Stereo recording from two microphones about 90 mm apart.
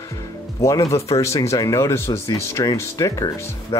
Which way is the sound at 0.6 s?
35° left (ahead or behind).